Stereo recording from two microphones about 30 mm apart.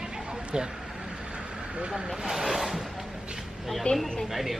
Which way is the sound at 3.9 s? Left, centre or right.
Left.